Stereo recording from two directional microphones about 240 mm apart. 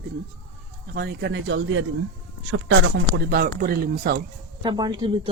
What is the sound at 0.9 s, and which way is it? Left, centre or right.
Speech, right.